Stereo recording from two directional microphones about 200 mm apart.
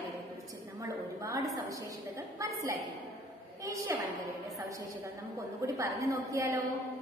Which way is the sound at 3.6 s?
15° right (ahead or behind).